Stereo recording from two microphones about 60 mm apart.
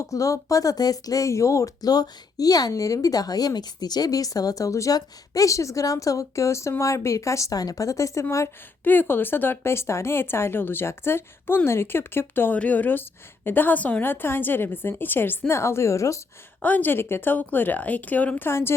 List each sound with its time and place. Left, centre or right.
0.0 s speech: left
1.3 s speech: left
8.8 s speech: left
12.5 s speech: left
14.0 s speech: left
16.6 s speech: left
18.4 s a woman's voice: left